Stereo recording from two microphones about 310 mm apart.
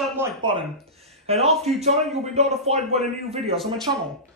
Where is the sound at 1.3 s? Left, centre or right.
Centre.